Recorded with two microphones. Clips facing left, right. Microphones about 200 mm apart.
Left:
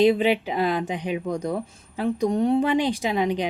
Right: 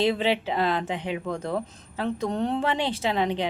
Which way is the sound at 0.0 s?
15° left (ahead or behind).